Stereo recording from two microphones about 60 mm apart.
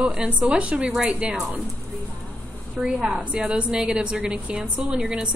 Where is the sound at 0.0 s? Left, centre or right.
Centre.